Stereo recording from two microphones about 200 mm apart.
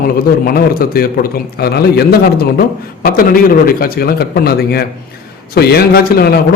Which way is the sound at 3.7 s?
45° left (ahead or behind).